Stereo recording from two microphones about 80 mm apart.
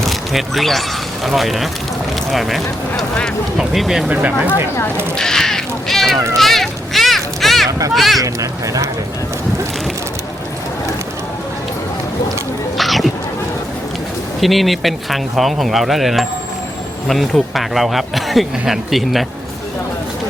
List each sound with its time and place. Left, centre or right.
0.0 s speech: centre
3.6 s speech: centre
4.1 s speech: centre
5.1 s crow: centre
6.3 s a sound: centre
7.7 s speech: right
7.9 s speech: centre
8.2 s speech: right
12.7 s speech: centre
14.4 s speech: centre